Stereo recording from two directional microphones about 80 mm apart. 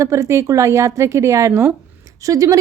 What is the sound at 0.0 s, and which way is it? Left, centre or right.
A woman's voice, right.